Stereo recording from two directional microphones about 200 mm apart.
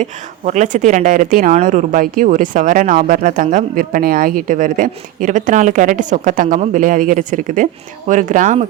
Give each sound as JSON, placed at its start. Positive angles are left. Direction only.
{"t": 0.0, "sound": "speech", "side_deg": -35}